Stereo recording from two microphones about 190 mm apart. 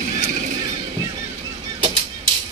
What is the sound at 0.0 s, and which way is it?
Vehicle, 40° right (ahead or behind).